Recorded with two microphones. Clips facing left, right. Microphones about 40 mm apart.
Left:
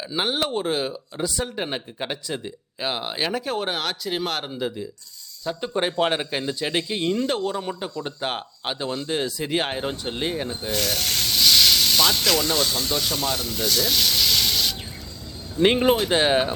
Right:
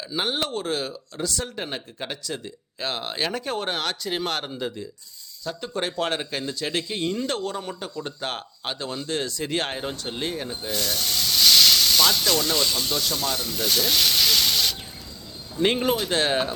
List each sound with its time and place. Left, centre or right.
0.0 s speech: centre
5.5 s speech: left
10.8 s speech: left
11.3 s hiss: centre
12.9 s speech: centre
13.7 s rub: centre
15.6 s speech: centre